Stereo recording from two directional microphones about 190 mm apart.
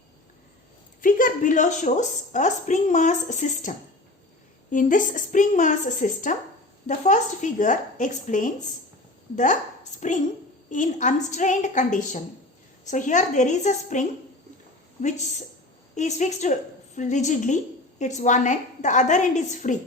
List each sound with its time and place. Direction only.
1.0 s a woman's voice: 45° left (ahead or behind)
16.0 s a woman's voice: 40° left (ahead or behind)